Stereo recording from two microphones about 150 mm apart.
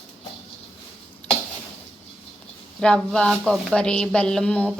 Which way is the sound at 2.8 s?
5° left (ahead or behind).